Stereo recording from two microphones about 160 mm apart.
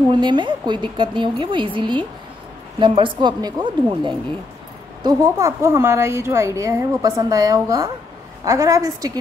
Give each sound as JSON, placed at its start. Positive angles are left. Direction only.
{"t": 0.1, "sound": "a woman's voice", "side_deg": -30}